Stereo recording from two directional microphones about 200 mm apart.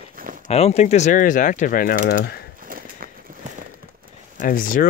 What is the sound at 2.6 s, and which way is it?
Horse, 45° right (ahead or behind).